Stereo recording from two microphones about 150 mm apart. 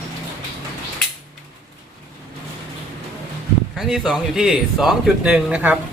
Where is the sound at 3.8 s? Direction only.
Centre (ahead or behind).